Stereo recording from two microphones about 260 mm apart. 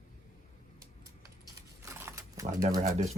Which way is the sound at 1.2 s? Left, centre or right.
Centre.